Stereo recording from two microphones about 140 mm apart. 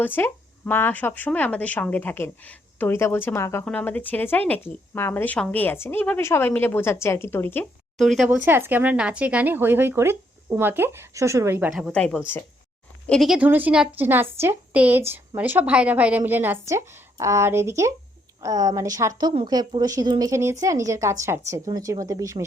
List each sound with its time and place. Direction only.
0.0 s speech: 15° left (ahead or behind)
7.9 s speech: centre (ahead or behind)
8.3 s speech: 15° right (ahead or behind)
11.9 s speech: 5° left (ahead or behind)
13.1 s speech: centre (ahead or behind); by 22.4 s 20° right (ahead or behind)